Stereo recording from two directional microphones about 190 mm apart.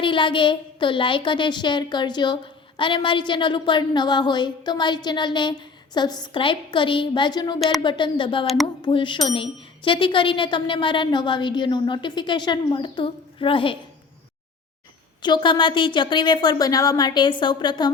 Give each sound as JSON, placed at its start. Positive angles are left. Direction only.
{"t": 0.0, "sound": "a woman's voice", "side_deg": 25}
{"t": 15.2, "sound": "a woman's voice", "side_deg": 25}